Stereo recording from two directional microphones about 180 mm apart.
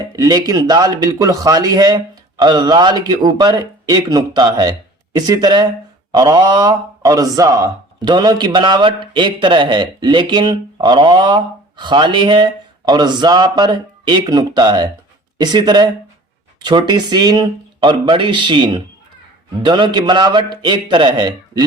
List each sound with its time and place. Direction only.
0.2 s speech: 20° right (ahead or behind)